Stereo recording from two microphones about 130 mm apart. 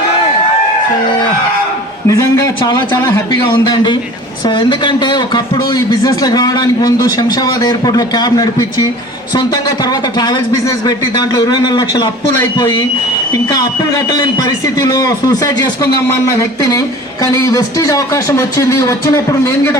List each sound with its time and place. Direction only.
2.0 s a man's voice: 25° left (ahead or behind)
10.2 s a man's voice: 30° left (ahead or behind)
13.3 s speech: 30° left (ahead or behind)